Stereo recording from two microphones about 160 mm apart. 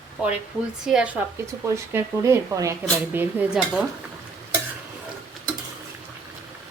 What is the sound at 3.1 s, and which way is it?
Stir, 10° right (ahead or behind).